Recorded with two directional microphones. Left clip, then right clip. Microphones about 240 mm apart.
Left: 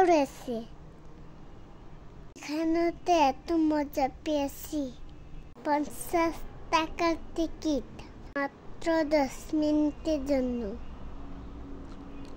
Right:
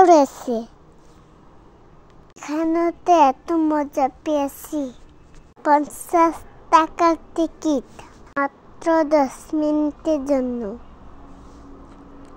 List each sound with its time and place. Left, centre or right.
0.0 s a child's voice: right
2.3 s a child's voice: centre